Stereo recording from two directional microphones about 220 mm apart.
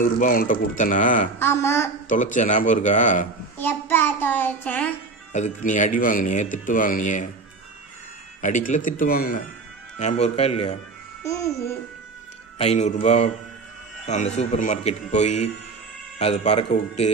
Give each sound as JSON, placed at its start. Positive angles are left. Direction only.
{"t": 0.0, "sound": "speech", "side_deg": 40}
{"t": 1.4, "sound": "a child's voice", "side_deg": 10}
{"t": 2.0, "sound": "speech", "side_deg": 35}
{"t": 3.5, "sound": "a child's voice", "side_deg": 10}
{"t": 5.3, "sound": "speech", "side_deg": 35}
{"t": 8.4, "sound": "speech", "side_deg": 35}
{"t": 9.9, "sound": "a man's voice", "side_deg": 30}
{"t": 11.2, "sound": "a child's voice", "side_deg": 15}
{"t": 12.5, "sound": "a man's voice", "side_deg": 30}